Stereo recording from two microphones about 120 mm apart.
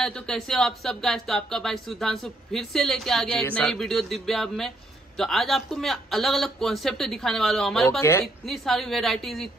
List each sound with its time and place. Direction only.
0.0 s a man's voice: 5° left (ahead or behind)
8.0 s a woman's voice: 20° left (ahead or behind)
8.5 s a man's voice: centre (ahead or behind)